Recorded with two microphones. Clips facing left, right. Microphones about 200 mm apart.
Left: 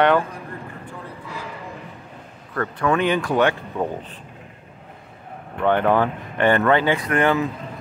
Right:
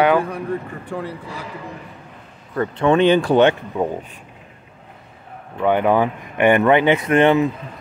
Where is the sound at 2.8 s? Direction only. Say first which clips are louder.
Right 6 dB; 25° right (ahead or behind).